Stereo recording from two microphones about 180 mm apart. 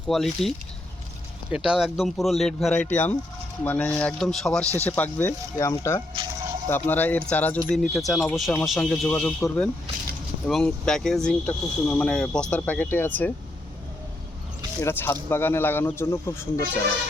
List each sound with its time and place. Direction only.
0.1 s speech: centre (ahead or behind)
1.5 s speech: 5° right (ahead or behind)
14.8 s speech: 15° left (ahead or behind)